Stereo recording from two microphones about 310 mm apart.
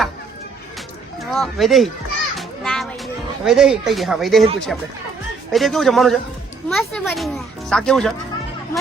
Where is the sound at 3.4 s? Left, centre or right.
Centre.